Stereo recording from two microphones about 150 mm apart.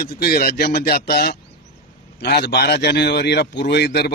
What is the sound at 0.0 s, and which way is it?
A man's voice, 85° left.